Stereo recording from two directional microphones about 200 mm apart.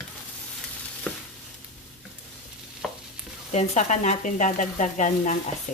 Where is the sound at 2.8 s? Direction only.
Centre (ahead or behind).